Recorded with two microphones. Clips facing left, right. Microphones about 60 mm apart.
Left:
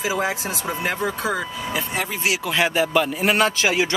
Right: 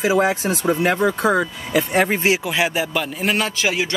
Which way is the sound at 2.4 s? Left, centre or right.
Centre.